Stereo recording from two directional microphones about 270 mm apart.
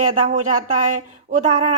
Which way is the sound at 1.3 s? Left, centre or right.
Right.